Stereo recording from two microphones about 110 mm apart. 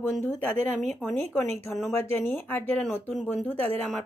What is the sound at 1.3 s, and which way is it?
Speech, 20° left (ahead or behind).